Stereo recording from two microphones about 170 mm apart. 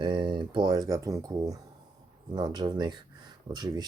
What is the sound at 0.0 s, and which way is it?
Speech, 30° right (ahead or behind).